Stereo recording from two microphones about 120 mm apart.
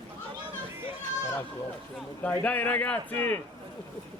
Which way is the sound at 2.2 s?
15° left (ahead or behind).